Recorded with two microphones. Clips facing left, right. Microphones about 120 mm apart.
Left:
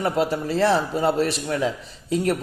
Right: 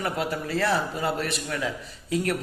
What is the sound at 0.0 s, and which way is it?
A man's voice, 30° left (ahead or behind).